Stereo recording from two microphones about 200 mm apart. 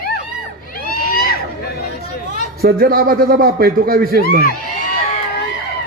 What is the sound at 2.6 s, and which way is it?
A man's voice, 50° right (ahead or behind).